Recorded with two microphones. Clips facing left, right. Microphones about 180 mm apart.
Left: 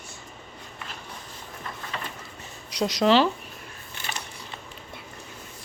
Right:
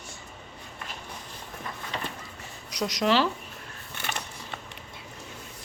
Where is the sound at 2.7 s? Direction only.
30° left (ahead or behind).